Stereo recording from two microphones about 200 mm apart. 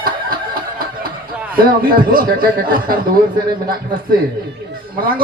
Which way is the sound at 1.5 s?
45° right (ahead or behind).